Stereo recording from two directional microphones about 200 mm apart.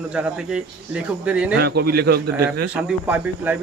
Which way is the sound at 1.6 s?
50° right (ahead or behind).